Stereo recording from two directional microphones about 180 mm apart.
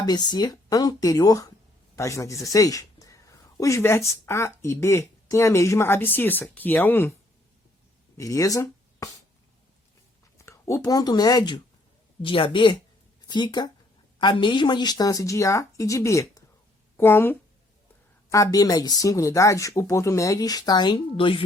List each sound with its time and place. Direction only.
0.0 s speech: 25° left (ahead or behind)
8.2 s speech: 20° left (ahead or behind)
10.3 s speech: 15° left (ahead or behind)